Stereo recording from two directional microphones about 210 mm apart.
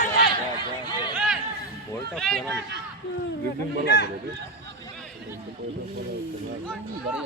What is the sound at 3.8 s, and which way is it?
Speech, 55° left (ahead or behind).